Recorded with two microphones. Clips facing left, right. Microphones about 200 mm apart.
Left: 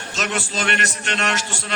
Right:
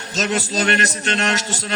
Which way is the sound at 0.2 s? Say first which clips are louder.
Right 4 dB; 40° right (ahead or behind).